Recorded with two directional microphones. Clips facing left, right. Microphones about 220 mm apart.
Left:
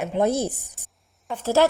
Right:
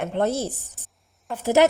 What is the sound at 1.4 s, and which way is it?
Speech, 20° right (ahead or behind).